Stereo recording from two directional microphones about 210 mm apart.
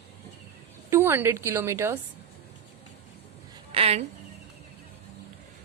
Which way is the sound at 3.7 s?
30° right (ahead or behind).